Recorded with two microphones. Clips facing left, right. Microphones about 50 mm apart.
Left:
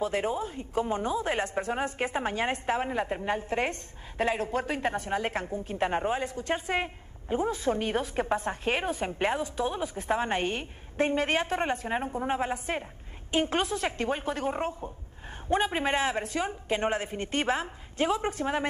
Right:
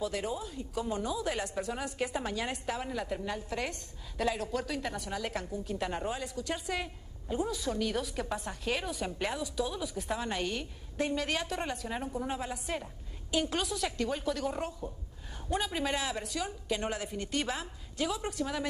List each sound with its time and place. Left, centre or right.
0.0 s a woman's voice: left